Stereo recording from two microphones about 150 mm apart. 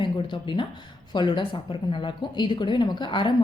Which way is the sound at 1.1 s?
30° left (ahead or behind).